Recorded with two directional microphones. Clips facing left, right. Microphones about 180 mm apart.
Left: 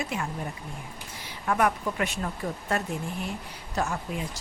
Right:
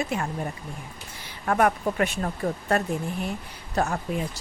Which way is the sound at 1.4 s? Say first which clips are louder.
Right 3 dB; 45° right (ahead or behind).